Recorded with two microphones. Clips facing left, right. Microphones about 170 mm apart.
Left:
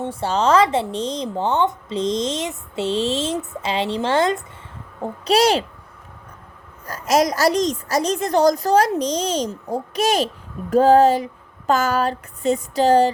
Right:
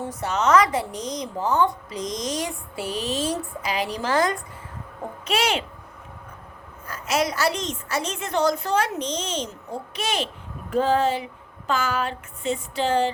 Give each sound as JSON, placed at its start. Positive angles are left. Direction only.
{"t": 0.0, "sound": "speech", "side_deg": 30}
{"t": 5.2, "sound": "a woman's voice", "side_deg": 35}
{"t": 6.8, "sound": "a woman's voice", "side_deg": 40}